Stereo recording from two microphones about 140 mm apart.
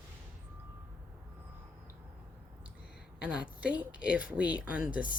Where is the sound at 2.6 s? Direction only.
5° right (ahead or behind).